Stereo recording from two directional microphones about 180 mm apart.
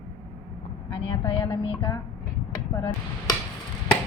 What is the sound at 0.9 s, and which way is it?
Speech, 30° left (ahead or behind).